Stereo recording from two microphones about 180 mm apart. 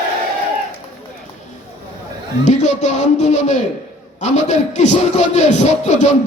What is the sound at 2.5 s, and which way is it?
A man's voice, 40° left (ahead or behind).